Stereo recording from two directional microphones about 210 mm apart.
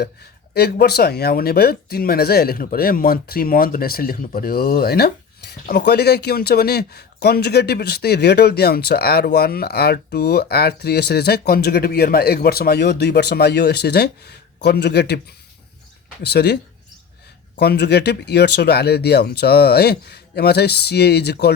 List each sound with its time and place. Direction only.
0.5 s speech: 50° left (ahead or behind)
16.2 s speech: 50° left (ahead or behind)
17.6 s speech: 50° left (ahead or behind)